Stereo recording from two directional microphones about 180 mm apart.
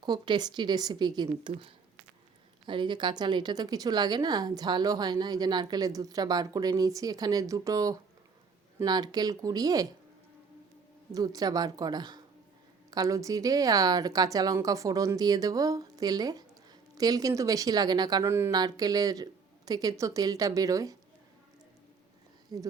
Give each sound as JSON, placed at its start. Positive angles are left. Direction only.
{"t": 0.0, "sound": "a woman's voice", "side_deg": -25}
{"t": 11.1, "sound": "a woman's voice", "side_deg": -20}
{"t": 22.5, "sound": "a woman's voice", "side_deg": -20}